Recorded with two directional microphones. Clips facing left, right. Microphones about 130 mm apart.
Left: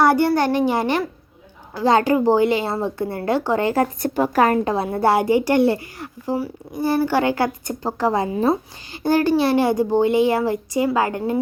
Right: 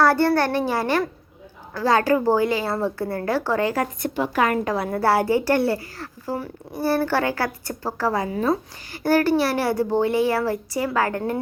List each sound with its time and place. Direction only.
0.0 s a child's voice: 15° left (ahead or behind)
4.0 s a woman's voice: 45° left (ahead or behind); by 11.3 s 15° left (ahead or behind)